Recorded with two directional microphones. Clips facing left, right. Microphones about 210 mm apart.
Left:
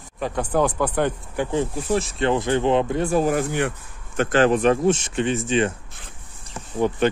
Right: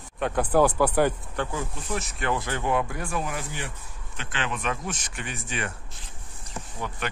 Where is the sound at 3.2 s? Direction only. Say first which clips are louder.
Left 12 dB; 55° left (ahead or behind).